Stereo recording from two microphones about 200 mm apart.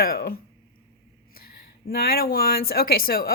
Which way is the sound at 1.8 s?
50° left (ahead or behind).